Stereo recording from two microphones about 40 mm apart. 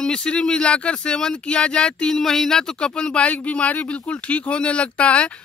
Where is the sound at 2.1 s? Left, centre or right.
Centre.